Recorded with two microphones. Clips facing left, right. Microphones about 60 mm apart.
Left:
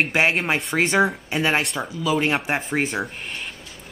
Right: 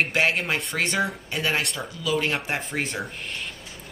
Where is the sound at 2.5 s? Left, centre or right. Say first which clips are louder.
Left 5 dB; centre.